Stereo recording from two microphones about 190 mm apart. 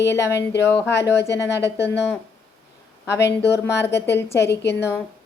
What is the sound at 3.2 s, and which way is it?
Speech, 60° left (ahead or behind).